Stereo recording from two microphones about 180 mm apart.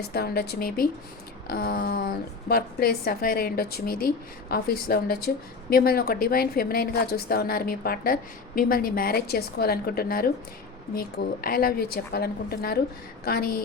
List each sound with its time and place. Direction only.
0.1 s a woman's voice: 60° left (ahead or behind)